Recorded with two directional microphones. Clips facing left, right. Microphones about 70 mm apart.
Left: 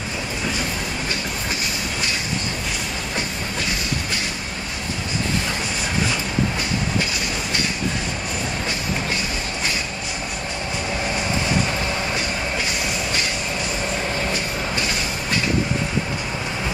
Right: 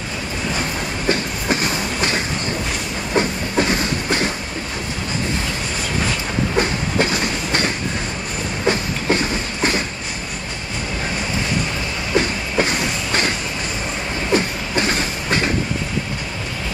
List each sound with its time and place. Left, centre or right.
1.5 s train: right
3.2 s train: right
6.6 s train: right
14.3 s train: right